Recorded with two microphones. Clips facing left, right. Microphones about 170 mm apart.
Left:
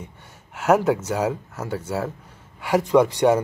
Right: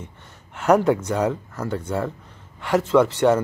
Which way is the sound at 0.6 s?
5° left (ahead or behind).